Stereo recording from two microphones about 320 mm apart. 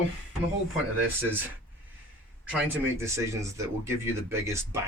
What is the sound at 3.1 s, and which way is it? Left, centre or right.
Speech, centre.